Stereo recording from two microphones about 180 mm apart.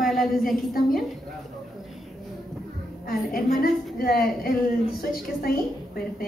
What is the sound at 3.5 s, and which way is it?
Speech, 55° left (ahead or behind).